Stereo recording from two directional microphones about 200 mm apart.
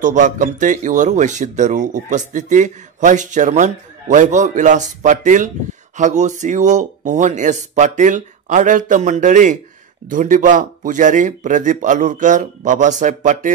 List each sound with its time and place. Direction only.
0.0 s speech: 40° right (ahead or behind)